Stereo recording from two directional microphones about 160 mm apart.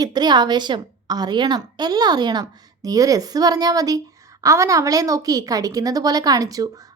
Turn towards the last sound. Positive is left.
turn(degrees=-20)  # may be behind; listen again after turning